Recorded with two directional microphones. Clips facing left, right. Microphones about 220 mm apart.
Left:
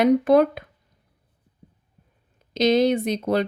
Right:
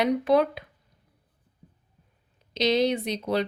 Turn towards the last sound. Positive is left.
turn(degrees=50)  # may be behind; listen again after turning